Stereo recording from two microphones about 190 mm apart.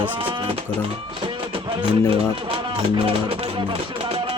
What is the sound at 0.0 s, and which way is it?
Music, 25° right (ahead or behind).